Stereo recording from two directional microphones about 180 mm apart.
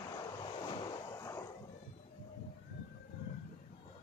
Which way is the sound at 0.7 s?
25° left (ahead or behind).